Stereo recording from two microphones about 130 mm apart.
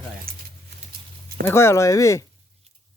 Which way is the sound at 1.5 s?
20° left (ahead or behind).